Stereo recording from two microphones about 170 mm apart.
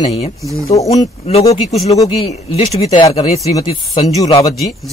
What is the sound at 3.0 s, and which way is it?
A man's voice, 25° left (ahead or behind).